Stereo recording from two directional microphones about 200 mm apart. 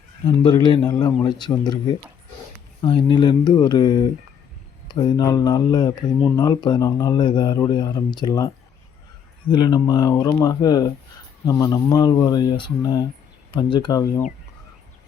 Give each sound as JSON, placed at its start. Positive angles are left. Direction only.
{"t": 0.4, "sound": "speech", "side_deg": 20}
{"t": 9.5, "sound": "speech", "side_deg": 20}